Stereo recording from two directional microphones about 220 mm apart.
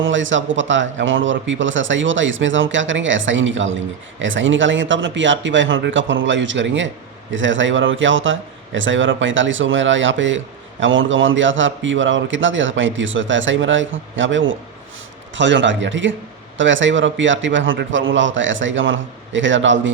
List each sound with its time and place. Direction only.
0.0 s a man's voice: 60° right (ahead or behind)